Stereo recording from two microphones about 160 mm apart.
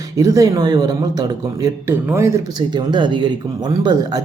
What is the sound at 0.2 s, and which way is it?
Speech, 20° right (ahead or behind).